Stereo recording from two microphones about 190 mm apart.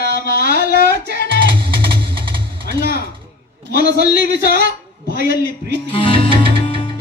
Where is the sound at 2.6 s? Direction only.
60° right (ahead or behind).